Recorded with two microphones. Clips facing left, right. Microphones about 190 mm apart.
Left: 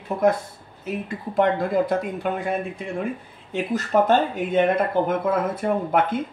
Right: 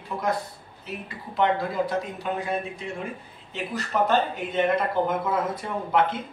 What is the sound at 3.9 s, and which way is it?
Speech, 45° left (ahead or behind).